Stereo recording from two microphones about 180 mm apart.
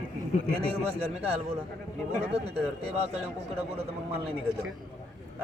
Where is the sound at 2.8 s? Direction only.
35° right (ahead or behind).